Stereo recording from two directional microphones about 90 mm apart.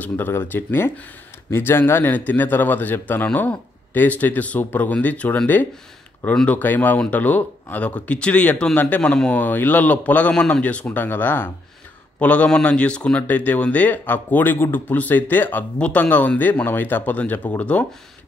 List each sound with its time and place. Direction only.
0.0 s speech: 25° left (ahead or behind)